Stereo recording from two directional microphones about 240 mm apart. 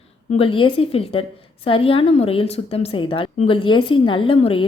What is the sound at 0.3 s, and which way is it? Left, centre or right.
A woman's voice, left.